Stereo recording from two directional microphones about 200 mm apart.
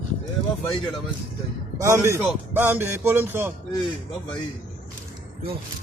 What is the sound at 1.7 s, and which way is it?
A man's voice, 15° right (ahead or behind).